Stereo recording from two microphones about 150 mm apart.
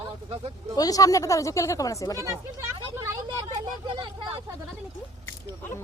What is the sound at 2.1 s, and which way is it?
Speech, 20° right (ahead or behind).